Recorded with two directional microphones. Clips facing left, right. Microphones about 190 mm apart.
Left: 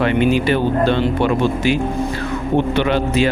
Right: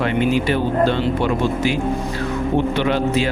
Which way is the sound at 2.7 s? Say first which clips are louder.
Left 2 dB; 70° left (ahead or behind).